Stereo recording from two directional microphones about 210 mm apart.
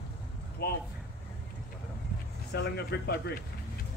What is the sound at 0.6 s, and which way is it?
Speech, 50° left (ahead or behind).